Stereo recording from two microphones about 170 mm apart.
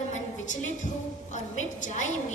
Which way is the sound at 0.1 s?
45° left (ahead or behind).